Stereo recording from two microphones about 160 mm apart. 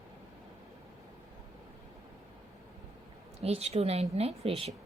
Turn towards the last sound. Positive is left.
turn(degrees=-40)  # may be behind; listen again after turning